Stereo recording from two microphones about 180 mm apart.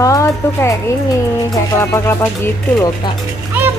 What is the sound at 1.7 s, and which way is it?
Speech, 15° left (ahead or behind).